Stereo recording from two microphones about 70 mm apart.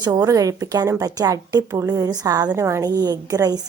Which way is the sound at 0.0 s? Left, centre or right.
Right.